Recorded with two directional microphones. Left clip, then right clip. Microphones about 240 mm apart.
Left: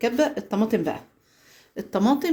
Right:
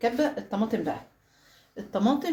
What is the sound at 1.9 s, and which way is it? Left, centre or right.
Speech, left.